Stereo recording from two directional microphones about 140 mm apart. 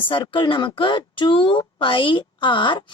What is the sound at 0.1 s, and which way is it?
Speech, 35° left (ahead or behind).